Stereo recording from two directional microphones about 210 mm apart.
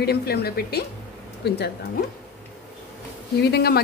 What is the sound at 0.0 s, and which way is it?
Dishes, 50° left (ahead or behind).